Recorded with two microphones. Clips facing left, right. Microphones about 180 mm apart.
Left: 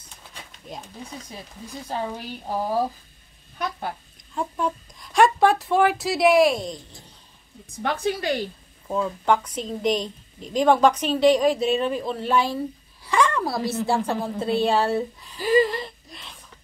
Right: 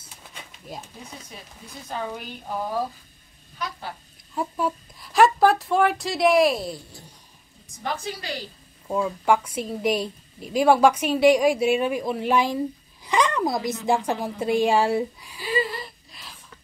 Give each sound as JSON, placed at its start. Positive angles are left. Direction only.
{"t": 0.0, "sound": "pigeon", "side_deg": -5}
{"t": 1.9, "sound": "speech", "side_deg": 35}
{"t": 3.5, "sound": "speech", "side_deg": 55}
{"t": 4.4, "sound": "speech", "side_deg": -5}
{"t": 7.8, "sound": "a woman's voice", "side_deg": 55}
{"t": 8.8, "sound": "a woman's voice", "side_deg": -10}
{"t": 15.4, "sound": "gasp", "side_deg": 45}